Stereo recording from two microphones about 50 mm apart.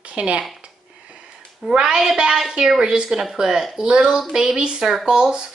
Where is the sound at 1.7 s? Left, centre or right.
Centre.